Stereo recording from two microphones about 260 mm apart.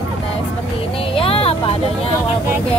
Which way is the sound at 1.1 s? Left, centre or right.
Left.